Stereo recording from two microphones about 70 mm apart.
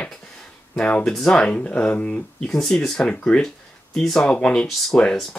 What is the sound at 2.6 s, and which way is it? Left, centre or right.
Speech, centre.